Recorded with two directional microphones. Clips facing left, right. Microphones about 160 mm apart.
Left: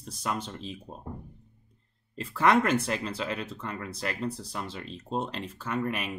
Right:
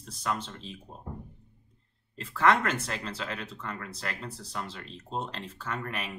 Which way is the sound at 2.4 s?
15° left (ahead or behind).